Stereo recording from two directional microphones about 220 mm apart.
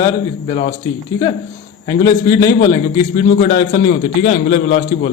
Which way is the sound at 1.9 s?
20° left (ahead or behind).